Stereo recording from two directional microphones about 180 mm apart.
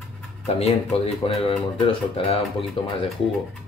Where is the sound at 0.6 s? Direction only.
35° left (ahead or behind).